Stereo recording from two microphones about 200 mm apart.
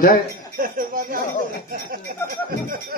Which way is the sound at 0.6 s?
45° right (ahead or behind).